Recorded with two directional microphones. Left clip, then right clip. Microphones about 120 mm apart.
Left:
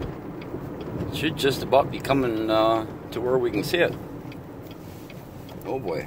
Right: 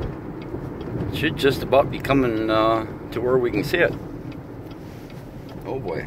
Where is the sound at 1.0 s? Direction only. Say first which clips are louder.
Right 3 dB; 25° left (ahead or behind).